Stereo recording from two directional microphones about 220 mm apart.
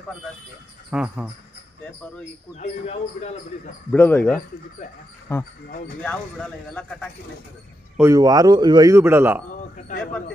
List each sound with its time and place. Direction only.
0.8 s speech: 5° right (ahead or behind)
2.5 s speech: 30° left (ahead or behind)
3.9 s speech: 10° left (ahead or behind)
8.0 s a man's voice: 15° right (ahead or behind)